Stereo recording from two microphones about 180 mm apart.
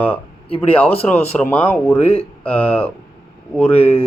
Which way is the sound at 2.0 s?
35° left (ahead or behind).